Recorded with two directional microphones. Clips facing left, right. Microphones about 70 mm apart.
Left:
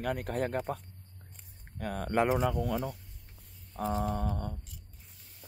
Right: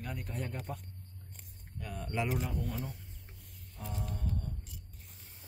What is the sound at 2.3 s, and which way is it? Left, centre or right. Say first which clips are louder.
Speech: left 8 dB; left.